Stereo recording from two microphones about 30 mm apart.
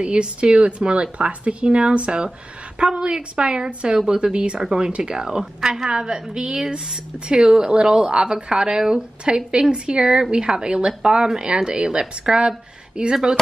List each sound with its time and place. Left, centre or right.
0.0 s a woman's voice: right
5.4 s a woman's voice: centre